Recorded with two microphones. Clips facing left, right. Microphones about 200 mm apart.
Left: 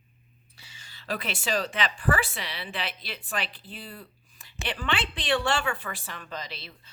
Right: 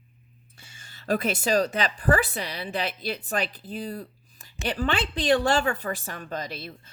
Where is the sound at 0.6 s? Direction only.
50° right (ahead or behind).